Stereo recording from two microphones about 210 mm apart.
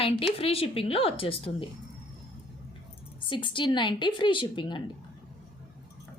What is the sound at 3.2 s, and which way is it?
Speech, 25° left (ahead or behind).